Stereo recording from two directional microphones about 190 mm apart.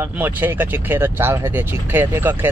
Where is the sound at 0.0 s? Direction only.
10° right (ahead or behind).